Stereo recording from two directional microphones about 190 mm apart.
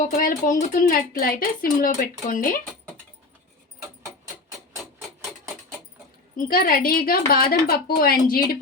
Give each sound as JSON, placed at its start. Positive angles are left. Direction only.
{"t": 0.0, "sound": "a woman's voice", "side_deg": 45}
{"t": 6.3, "sound": "a woman's voice", "side_deg": 50}